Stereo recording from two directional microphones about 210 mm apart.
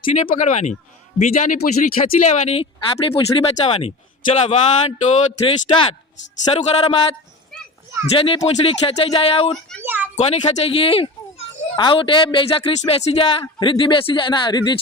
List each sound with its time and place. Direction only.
0.1 s speech: 35° left (ahead or behind)
9.8 s a sound: 10° right (ahead or behind)
10.2 s speech: 30° left (ahead or behind)